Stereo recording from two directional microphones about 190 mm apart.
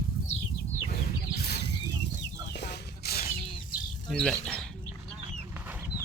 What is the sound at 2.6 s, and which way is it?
Chicken, 60° left (ahead or behind).